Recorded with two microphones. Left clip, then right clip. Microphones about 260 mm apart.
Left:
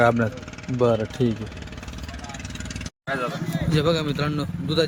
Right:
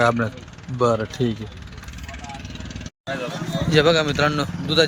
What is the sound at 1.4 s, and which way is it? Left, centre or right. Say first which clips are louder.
Vehicle: left 1 dB; left.